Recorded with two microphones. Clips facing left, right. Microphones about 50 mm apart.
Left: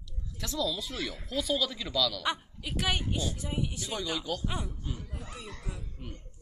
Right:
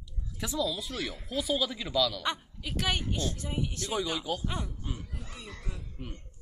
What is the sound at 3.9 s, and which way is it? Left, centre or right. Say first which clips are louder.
Speech: right 3 dB; centre.